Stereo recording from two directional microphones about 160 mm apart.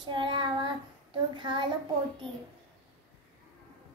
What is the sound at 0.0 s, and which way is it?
A child's voice, 30° right (ahead or behind).